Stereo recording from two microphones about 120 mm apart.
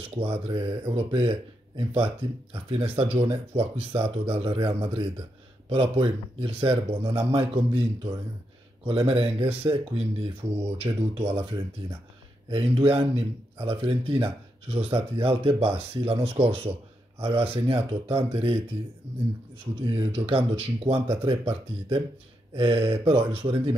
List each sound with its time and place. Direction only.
0.0 s speech: 50° right (ahead or behind)
10.8 s speech: 35° right (ahead or behind)
12.4 s speech: 45° right (ahead or behind)
19.8 s speech: 50° right (ahead or behind)